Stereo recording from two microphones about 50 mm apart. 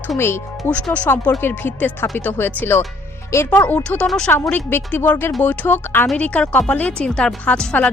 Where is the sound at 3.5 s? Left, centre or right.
Left.